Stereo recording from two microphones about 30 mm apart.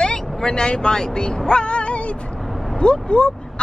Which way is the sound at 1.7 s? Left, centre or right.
Left.